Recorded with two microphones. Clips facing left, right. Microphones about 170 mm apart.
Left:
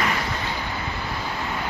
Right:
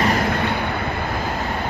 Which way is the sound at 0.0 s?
50° right (ahead or behind).